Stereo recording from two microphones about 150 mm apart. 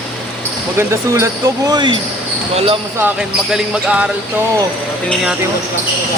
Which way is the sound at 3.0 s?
5° right (ahead or behind).